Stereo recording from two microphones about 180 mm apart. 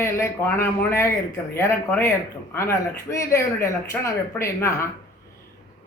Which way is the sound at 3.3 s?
15° left (ahead or behind).